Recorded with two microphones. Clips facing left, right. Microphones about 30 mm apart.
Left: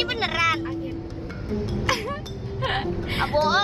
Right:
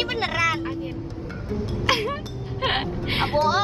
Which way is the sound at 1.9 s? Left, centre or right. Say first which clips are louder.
Right 4 dB; right.